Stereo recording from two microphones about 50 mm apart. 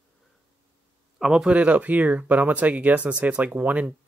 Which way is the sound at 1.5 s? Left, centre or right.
Right.